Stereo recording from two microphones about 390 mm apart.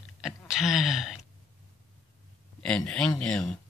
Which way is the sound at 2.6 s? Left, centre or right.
Centre.